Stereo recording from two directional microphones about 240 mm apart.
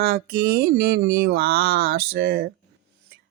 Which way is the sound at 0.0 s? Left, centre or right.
Right.